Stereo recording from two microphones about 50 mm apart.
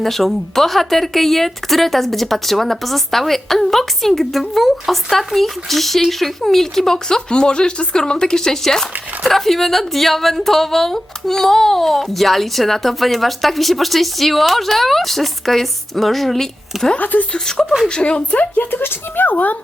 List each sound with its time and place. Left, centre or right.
0.0 s a woman's voice: centre
7.3 s a woman's voice: centre
17.0 s speech: left
17.3 s speech: centre
17.8 s speech: centre; by 18.8 s left
18.8 s speech: left